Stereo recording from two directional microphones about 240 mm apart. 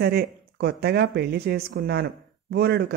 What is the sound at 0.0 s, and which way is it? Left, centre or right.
Speech, right.